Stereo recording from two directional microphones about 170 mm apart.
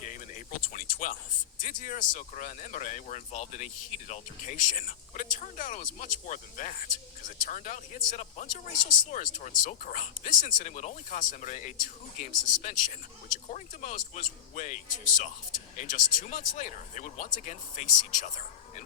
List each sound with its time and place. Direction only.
0.0 s a sound: 45° left (ahead or behind)
1.5 s speech: 50° left (ahead or behind)
8.8 s speech: 25° left (ahead or behind)
9.0 s speech: 45° left (ahead or behind)